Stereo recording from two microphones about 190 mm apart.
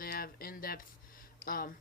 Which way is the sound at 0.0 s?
50° left (ahead or behind).